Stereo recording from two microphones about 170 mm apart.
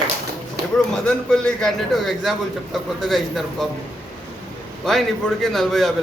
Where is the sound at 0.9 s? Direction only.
5° left (ahead or behind).